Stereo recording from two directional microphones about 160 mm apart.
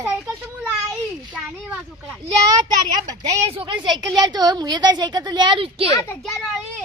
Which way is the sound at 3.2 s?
25° right (ahead or behind).